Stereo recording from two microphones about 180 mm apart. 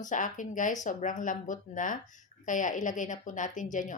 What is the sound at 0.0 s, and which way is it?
A woman's voice, 45° left (ahead or behind).